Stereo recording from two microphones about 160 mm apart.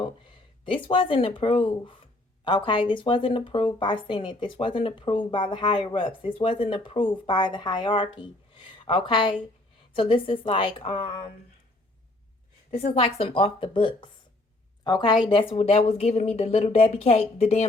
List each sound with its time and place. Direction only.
0.0 s speech: 30° left (ahead or behind)
12.7 s speech: 40° left (ahead or behind)